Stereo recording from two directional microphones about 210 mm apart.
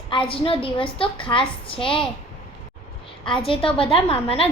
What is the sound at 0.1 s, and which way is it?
A woman's voice, 25° left (ahead or behind).